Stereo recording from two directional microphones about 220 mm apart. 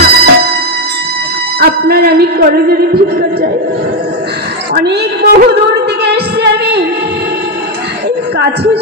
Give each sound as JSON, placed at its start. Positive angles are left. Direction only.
{"t": 0.0, "sound": "music", "side_deg": -45}
{"t": 1.6, "sound": "music", "side_deg": -45}
{"t": 4.7, "sound": "speech", "side_deg": -45}
{"t": 6.0, "sound": "music", "side_deg": -50}